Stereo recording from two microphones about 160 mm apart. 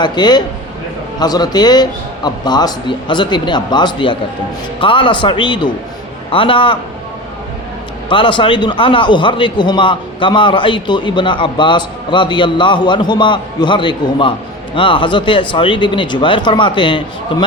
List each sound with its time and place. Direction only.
0.0 s a man's voice: 25° left (ahead or behind)
8.1 s a man's voice: 30° left (ahead or behind)